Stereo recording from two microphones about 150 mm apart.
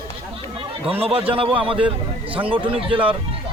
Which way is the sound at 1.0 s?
40° right (ahead or behind).